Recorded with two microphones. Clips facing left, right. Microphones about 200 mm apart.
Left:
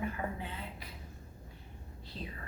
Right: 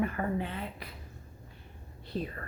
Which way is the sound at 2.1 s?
55° right (ahead or behind).